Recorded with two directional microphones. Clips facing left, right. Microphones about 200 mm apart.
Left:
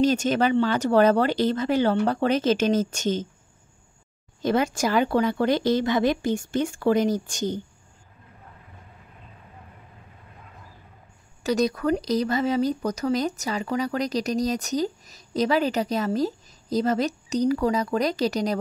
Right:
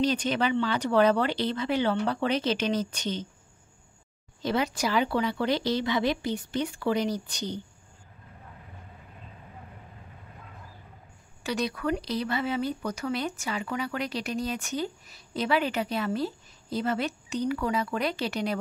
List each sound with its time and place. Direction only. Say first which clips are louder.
0.0 s speech: left 5 dB; 45° left (ahead or behind)
4.4 s speech: left 5 dB; 50° left (ahead or behind)
11.4 s speech: left 6 dB; 40° left (ahead or behind)